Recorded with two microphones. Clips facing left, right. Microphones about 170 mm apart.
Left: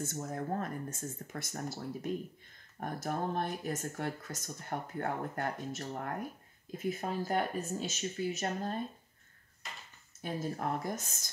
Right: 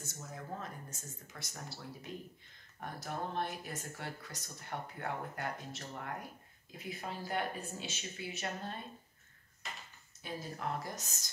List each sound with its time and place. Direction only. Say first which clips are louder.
0.0 s speech: left 10 dB; 55° left (ahead or behind)
10.2 s speech: left 5 dB; 50° left (ahead or behind)